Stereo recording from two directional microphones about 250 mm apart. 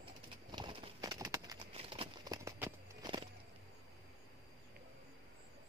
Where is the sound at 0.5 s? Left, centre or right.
Centre.